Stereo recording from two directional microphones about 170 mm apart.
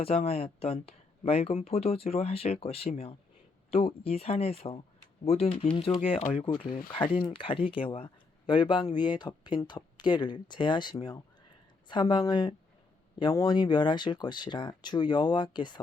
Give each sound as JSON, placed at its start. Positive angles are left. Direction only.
{"t": 0.0, "sound": "speech", "side_deg": 35}